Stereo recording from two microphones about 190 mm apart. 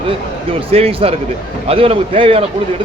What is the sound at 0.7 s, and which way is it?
A man's voice, 30° right (ahead or behind).